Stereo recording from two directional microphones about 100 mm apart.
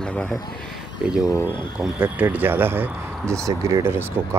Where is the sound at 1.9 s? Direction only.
15° right (ahead or behind).